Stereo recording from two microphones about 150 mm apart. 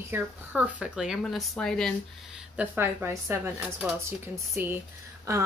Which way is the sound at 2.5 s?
15° right (ahead or behind).